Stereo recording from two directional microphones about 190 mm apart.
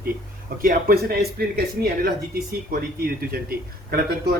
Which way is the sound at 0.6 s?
50° right (ahead or behind).